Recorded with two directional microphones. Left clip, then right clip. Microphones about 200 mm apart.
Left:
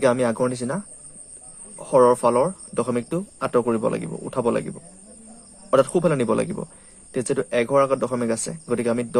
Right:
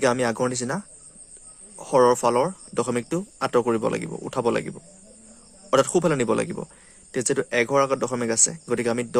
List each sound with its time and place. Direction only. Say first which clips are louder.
0.0 s speech: left 2 dB; 25° right (ahead or behind)
1.8 s speech: left 2 dB; 25° right (ahead or behind)
5.7 s speech: left 2 dB; 25° right (ahead or behind)